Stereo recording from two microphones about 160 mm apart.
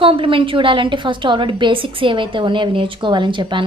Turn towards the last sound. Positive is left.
turn(degrees=-30)  # may be behind; listen again after turning